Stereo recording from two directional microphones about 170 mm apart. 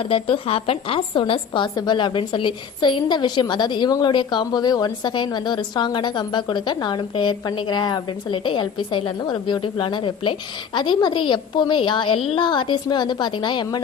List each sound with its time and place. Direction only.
0.0 s a woman's voice: 30° left (ahead or behind)